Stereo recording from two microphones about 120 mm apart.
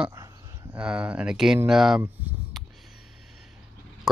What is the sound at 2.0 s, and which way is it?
Speech, 15° right (ahead or behind).